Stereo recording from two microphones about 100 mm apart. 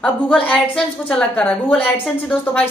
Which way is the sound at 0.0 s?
10° left (ahead or behind).